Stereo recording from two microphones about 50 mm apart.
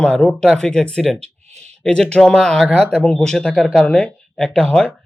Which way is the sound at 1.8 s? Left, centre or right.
Centre.